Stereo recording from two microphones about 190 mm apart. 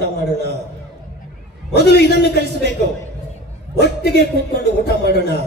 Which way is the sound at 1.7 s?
60° left (ahead or behind).